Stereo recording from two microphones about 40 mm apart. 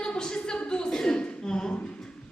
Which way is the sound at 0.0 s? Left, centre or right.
Left.